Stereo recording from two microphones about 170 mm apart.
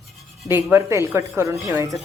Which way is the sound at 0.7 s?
15° right (ahead or behind).